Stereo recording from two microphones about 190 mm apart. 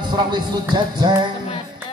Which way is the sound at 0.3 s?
25° right (ahead or behind).